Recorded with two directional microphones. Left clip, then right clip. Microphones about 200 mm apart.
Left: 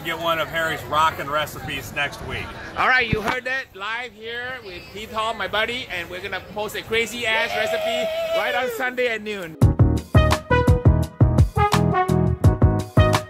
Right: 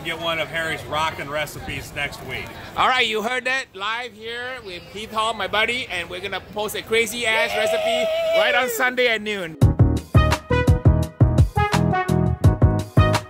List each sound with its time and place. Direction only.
0.0 s speech: centre (ahead or behind)
2.8 s a man's voice: 20° right (ahead or behind)
9.6 s music: centre (ahead or behind)